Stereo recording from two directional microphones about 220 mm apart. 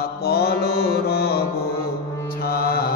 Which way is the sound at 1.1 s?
45° left (ahead or behind).